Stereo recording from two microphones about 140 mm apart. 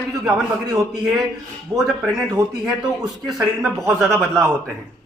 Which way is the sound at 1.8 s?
Centre (ahead or behind).